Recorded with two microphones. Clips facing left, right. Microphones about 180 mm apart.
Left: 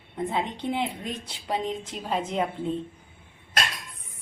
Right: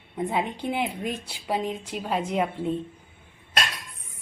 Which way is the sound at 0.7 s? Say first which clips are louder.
Right 1 dB; 5° right (ahead or behind).